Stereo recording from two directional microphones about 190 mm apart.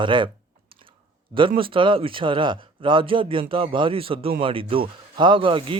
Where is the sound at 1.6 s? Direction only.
25° right (ahead or behind).